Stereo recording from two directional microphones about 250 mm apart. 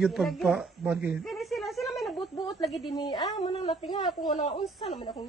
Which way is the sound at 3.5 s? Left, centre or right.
Left.